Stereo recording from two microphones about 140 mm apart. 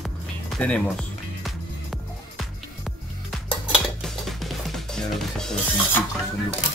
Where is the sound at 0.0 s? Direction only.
5° left (ahead or behind).